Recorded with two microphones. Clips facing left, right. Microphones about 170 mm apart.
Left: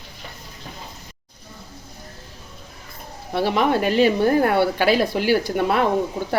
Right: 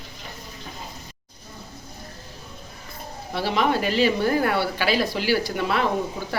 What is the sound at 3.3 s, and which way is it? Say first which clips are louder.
Speech: left 3 dB; 55° left (ahead or behind).